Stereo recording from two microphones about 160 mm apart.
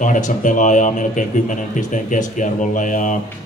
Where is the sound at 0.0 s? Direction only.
55° left (ahead or behind).